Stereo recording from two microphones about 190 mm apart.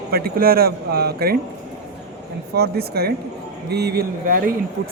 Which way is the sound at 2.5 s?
55° right (ahead or behind).